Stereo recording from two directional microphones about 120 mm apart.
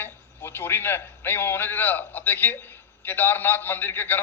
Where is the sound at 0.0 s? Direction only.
15° left (ahead or behind).